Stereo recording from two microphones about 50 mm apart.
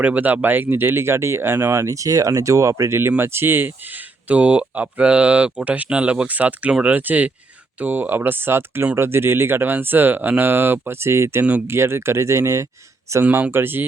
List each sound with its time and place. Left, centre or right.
0.0 s speech: right
3.2 s speech: right
4.3 s speech: right
13.1 s speech: right
13.5 s speech: right